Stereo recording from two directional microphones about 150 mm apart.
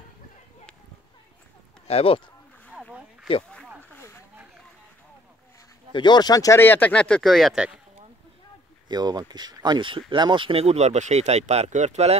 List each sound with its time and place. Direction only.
1.9 s speech: 40° left (ahead or behind)
3.9 s a sound: 15° left (ahead or behind)
5.9 s speech: 30° left (ahead or behind); by 7.8 s 5° right (ahead or behind)
8.8 s speech: 25° right (ahead or behind); by 12.2 s 45° right (ahead or behind)